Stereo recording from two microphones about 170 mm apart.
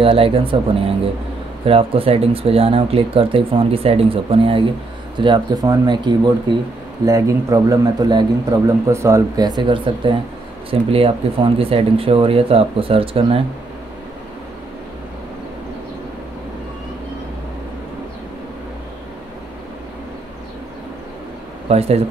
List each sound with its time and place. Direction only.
0.0 s a man's voice: 30° right (ahead or behind)
21.6 s speech: 35° right (ahead or behind)